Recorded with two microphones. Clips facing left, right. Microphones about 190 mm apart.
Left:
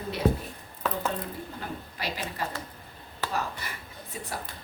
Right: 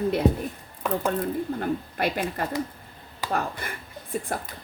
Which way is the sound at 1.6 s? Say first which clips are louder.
Right 10 dB; 55° right (ahead or behind).